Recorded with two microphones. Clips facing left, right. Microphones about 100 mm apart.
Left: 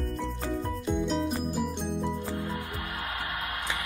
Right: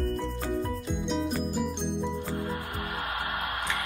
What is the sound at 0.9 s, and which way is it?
Music, centre (ahead or behind).